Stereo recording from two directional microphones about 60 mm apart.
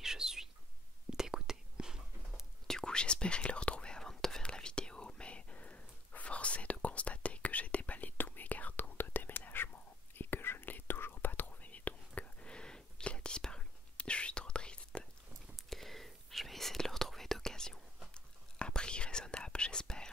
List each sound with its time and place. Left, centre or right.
0.0 s bird: centre
1.1 s whispering: centre
2.6 s whispering: centre
15.5 s whispering: centre